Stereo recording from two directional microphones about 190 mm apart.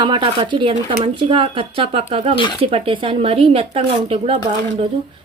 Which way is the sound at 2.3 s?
25° left (ahead or behind).